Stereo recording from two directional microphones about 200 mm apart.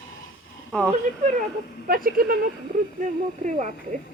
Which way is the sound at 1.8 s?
45° right (ahead or behind).